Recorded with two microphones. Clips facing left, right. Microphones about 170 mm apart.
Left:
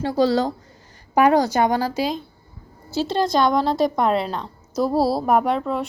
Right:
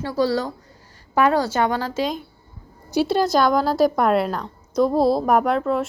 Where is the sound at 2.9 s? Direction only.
10° right (ahead or behind).